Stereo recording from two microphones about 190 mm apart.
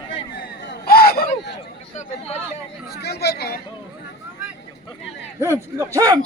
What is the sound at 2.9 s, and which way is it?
Speech, 60° left (ahead or behind).